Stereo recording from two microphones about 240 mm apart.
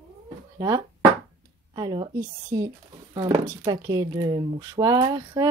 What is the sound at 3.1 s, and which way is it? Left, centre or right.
Speech, centre.